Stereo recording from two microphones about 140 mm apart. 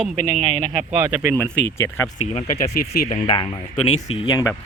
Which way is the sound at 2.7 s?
75° left (ahead or behind).